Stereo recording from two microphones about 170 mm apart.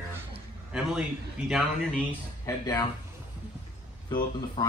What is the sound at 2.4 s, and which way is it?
Speech, 25° left (ahead or behind).